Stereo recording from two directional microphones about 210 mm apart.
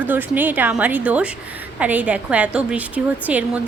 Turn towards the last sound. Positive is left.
turn(degrees=-5)  # may be behind; listen again after turning